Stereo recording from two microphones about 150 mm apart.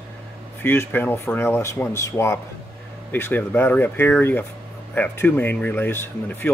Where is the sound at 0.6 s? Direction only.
15° left (ahead or behind).